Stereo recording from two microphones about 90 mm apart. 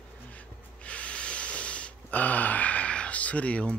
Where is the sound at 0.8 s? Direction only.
15° left (ahead or behind).